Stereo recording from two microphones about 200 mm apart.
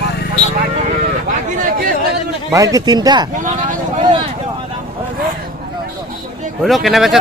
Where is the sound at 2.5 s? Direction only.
15° right (ahead or behind).